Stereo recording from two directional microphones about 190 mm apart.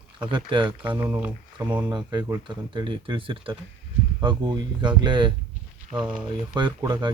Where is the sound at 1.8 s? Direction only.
20° right (ahead or behind).